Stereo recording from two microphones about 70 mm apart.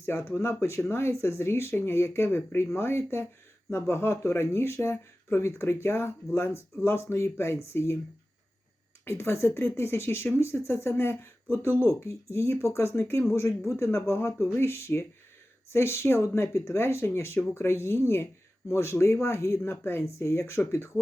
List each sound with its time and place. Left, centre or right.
0.0 s speech: left
9.0 s speech: left